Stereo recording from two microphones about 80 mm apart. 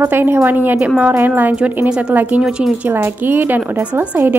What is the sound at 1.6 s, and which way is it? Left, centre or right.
Speech, centre.